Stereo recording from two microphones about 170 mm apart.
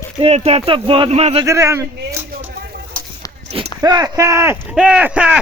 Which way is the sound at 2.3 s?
70° right (ahead or behind).